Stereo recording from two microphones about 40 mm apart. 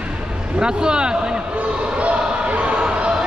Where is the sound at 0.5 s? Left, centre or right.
Right.